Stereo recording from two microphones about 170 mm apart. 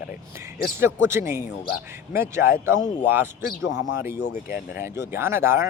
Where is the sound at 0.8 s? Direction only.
15° right (ahead or behind).